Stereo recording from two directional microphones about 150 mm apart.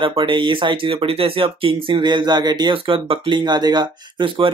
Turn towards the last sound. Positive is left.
turn(degrees=-35)  # may be behind; listen again after turning